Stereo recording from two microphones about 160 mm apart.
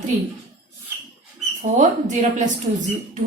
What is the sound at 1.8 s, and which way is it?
Speech, 50° right (ahead or behind).